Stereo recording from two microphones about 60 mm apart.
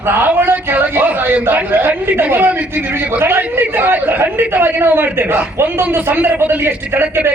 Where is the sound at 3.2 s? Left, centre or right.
Right.